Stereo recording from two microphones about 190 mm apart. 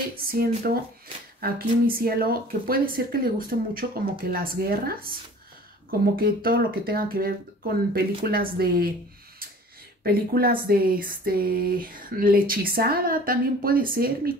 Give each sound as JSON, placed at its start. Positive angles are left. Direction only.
{"t": 0.2, "sound": "speech", "side_deg": -50}
{"t": 10.0, "sound": "speech", "side_deg": -55}